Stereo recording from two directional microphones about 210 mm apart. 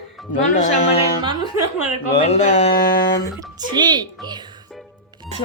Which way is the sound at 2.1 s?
30° left (ahead or behind).